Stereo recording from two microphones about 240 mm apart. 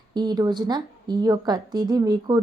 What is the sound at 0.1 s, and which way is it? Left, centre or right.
Speech, centre.